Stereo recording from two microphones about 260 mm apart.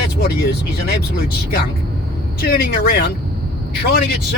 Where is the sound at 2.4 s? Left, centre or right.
Left.